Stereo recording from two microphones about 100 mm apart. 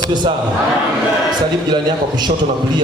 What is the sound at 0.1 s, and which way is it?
Speech, 50° right (ahead or behind).